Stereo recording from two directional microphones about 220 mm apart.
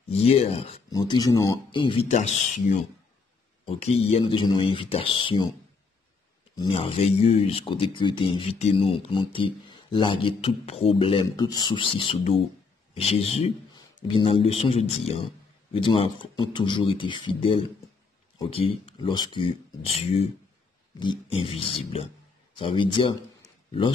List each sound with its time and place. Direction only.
0.1 s speech: 25° left (ahead or behind)
6.5 s a man's voice: 20° left (ahead or behind)